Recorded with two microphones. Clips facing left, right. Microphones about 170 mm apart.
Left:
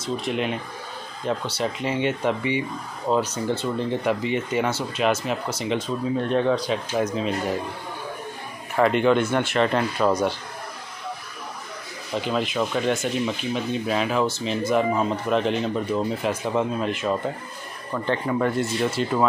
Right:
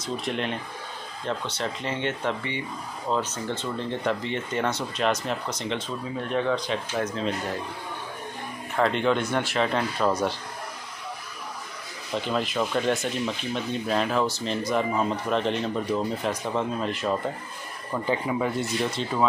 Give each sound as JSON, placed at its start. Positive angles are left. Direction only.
{"t": 0.0, "sound": "speech", "side_deg": 0}
{"t": 6.2, "sound": "speech", "side_deg": 30}
{"t": 6.7, "sound": "speech", "side_deg": 10}
{"t": 8.7, "sound": "speech", "side_deg": 5}
{"t": 12.1, "sound": "speech", "side_deg": 0}
{"t": 17.9, "sound": "speech", "side_deg": -10}